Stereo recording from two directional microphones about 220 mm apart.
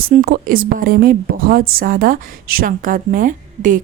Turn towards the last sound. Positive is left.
turn(degrees=-35)  # may be behind; listen again after turning